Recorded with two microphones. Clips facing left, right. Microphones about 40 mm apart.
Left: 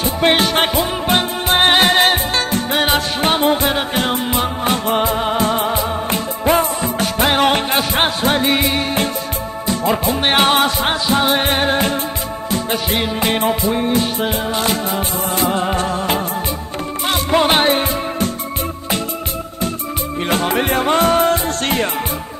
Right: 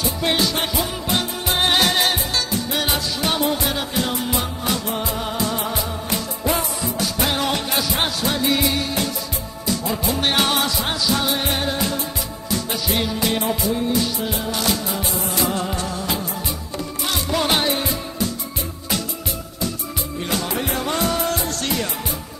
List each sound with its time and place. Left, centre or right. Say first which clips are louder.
0.0 s music: left 6 dB; left
20.2 s music: left 7 dB; left